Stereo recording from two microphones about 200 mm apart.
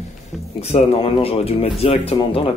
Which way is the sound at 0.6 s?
30° left (ahead or behind).